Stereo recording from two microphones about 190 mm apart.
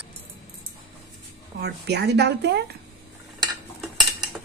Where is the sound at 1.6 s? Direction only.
60° right (ahead or behind).